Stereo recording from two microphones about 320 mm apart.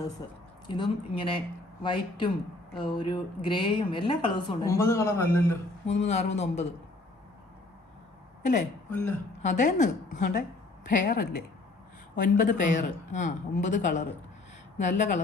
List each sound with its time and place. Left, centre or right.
0.7 s a woman's voice: centre
5.8 s speech: centre
9.4 s speech: left